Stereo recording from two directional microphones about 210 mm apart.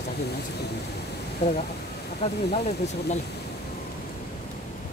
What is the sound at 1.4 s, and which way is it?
Speech, 30° left (ahead or behind).